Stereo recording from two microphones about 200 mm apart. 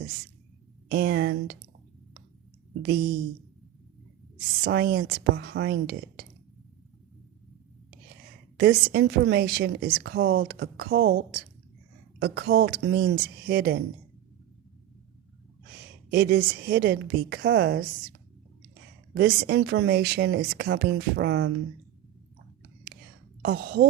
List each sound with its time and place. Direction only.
0.9 s a woman's voice: 50° right (ahead or behind)
2.8 s a woman's voice: 50° right (ahead or behind)
4.6 s a woman's voice: 50° right (ahead or behind)
8.5 s a woman's voice: 55° right (ahead or behind)
16.0 s a woman's voice: 50° right (ahead or behind); by 17.8 s 70° right (ahead or behind)
19.1 s speech: 55° right (ahead or behind)
23.4 s a woman's voice: 50° right (ahead or behind)